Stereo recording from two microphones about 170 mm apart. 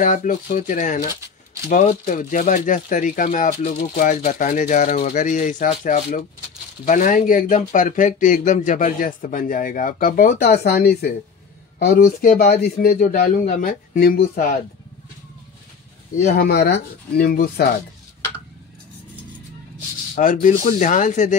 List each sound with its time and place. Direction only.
0.0 s speech: 50° left (ahead or behind); by 12.9 s 65° left (ahead or behind)
12.9 s speech: 55° left (ahead or behind)
16.3 s speech: 70° left (ahead or behind)
20.4 s speech: 50° left (ahead or behind)